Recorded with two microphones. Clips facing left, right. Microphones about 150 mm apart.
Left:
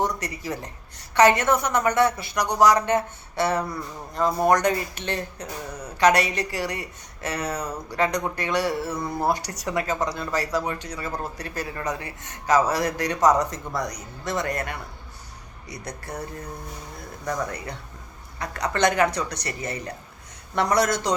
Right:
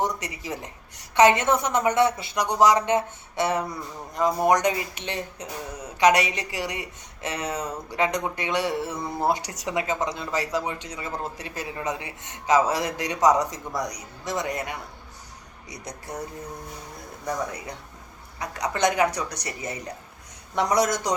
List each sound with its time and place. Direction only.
0.4 s a woman's voice: 20° right (ahead or behind)
17.2 s speech: 15° right (ahead or behind)